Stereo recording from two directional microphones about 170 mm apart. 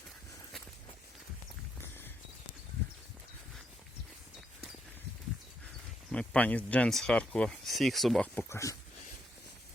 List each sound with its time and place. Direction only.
6.1 s speech: 5° left (ahead or behind)
8.4 s speech: 15° left (ahead or behind)